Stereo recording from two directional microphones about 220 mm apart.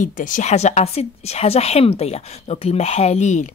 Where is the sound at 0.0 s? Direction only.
35° left (ahead or behind).